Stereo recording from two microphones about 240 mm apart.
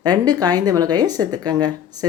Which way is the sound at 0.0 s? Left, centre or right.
Centre.